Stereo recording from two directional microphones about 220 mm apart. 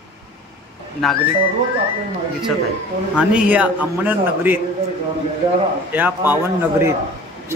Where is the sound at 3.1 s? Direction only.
5° right (ahead or behind).